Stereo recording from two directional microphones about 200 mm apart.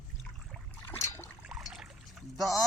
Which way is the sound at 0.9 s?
15° left (ahead or behind).